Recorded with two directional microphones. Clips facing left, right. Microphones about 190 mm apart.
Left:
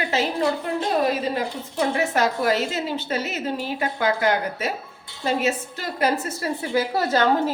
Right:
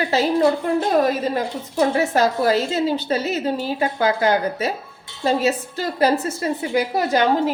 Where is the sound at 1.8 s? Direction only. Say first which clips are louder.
Right 4 dB; 35° right (ahead or behind).